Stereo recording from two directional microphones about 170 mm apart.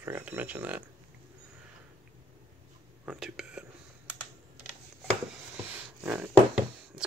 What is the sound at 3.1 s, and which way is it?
Speech, 5° right (ahead or behind).